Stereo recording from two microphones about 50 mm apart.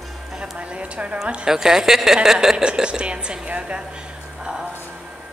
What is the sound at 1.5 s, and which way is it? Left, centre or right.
Speech, centre.